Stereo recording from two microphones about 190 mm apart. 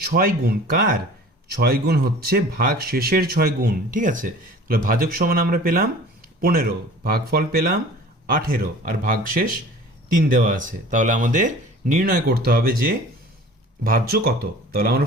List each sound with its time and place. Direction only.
0.0 s speech: 50° right (ahead or behind)